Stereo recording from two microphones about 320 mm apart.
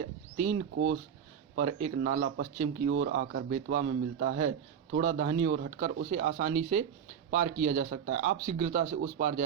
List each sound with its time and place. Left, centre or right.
0.3 s speech: right
2.0 s speech: right